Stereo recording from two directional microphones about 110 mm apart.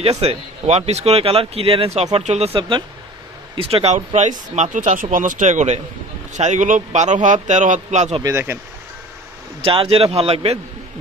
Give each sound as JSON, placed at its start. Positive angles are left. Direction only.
{"t": 0.0, "sound": "speech", "side_deg": -65}
{"t": 3.5, "sound": "speech", "side_deg": -60}
{"t": 8.2, "sound": "speech", "side_deg": -30}
{"t": 9.6, "sound": "a man's voice", "side_deg": -55}